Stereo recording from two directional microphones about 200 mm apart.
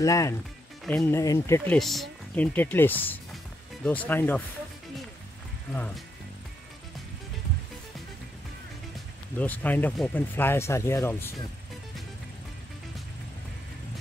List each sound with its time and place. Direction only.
0.0 s speech: 15° left (ahead or behind)
1.8 s speech: centre (ahead or behind)
5.7 s speech: 5° left (ahead or behind)
9.4 s speech: 10° left (ahead or behind)